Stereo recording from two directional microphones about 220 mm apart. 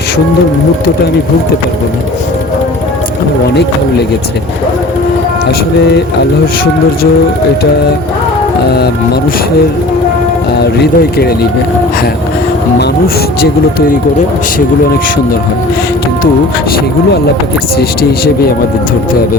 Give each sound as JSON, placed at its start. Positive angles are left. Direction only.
{"t": 3.5, "sound": "speech", "side_deg": 50}
{"t": 10.6, "sound": "speech", "side_deg": 45}